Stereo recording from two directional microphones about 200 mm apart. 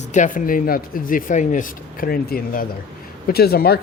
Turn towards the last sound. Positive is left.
turn(degrees=50)  # may be behind; listen again after turning